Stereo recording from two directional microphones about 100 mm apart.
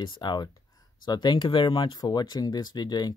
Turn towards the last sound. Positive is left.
turn(degrees=45)  # may be behind; listen again after turning